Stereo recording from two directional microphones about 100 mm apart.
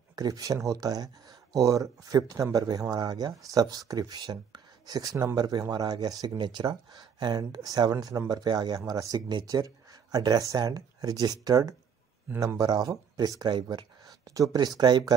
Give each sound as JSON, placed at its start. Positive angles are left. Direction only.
{"t": 0.1, "sound": "speech", "side_deg": -40}
{"t": 14.3, "sound": "speech", "side_deg": -35}